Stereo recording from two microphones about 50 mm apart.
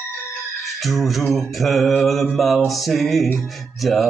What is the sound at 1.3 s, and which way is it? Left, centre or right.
Mantra, centre.